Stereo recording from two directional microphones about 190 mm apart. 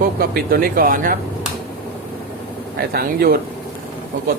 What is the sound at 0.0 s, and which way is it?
Speech, 50° right (ahead or behind).